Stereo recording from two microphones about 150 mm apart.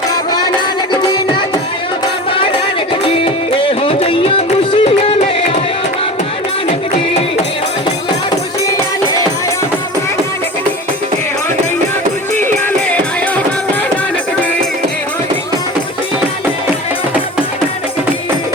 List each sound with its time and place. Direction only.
3.0 s music: 35° left (ahead or behind)